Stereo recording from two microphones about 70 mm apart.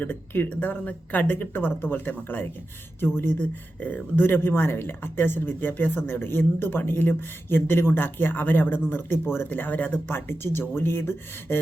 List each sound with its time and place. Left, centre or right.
0.0 s speech: left
3.8 s speech: left
10.2 s speech: left